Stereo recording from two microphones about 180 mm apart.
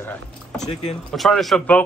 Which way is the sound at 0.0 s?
5° left (ahead or behind).